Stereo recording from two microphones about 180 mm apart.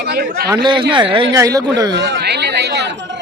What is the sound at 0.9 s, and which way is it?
Speech, 30° right (ahead or behind).